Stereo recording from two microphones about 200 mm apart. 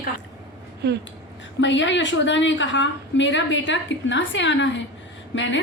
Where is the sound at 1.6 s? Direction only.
65° left (ahead or behind).